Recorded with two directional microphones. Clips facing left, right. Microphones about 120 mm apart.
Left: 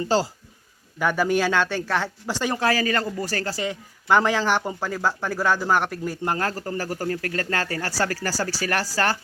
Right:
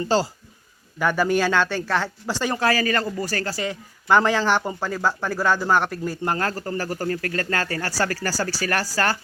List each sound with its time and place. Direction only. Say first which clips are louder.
0.0 s speech: right 1 dB; 15° left (ahead or behind)